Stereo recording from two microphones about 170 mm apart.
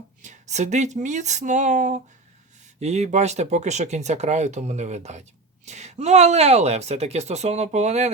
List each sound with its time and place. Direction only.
0.2 s speech: 45° right (ahead or behind)